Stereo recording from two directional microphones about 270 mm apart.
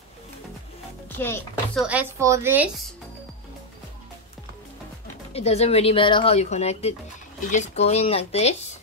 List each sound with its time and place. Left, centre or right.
1.1 s speech: centre
1.9 s a woman's voice: centre
5.3 s speech: left